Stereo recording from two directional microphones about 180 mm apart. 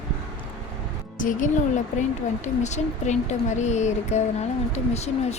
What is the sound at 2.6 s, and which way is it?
Speech, 40° left (ahead or behind).